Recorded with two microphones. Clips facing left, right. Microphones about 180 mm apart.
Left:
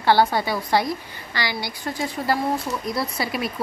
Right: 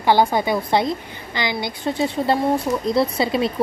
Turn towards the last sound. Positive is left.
turn(degrees=-25)  # may be behind; listen again after turning